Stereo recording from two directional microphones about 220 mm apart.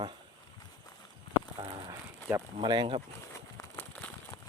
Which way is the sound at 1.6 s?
15° right (ahead or behind).